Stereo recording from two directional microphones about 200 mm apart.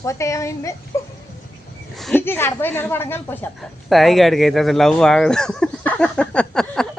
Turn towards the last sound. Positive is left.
turn(degrees=5)  # may be behind; listen again after turning